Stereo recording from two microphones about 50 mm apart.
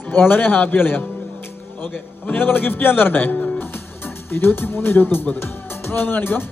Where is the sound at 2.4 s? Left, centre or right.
Left.